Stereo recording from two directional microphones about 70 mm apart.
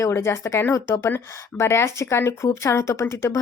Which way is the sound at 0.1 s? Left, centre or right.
Left.